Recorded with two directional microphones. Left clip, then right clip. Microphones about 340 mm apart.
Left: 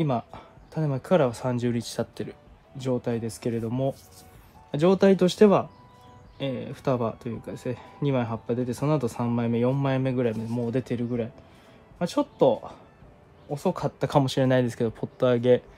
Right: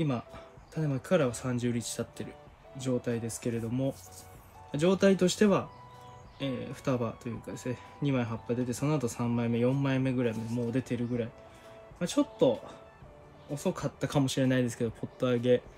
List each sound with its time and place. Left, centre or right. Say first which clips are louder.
0.7 s speech: left 6 dB; centre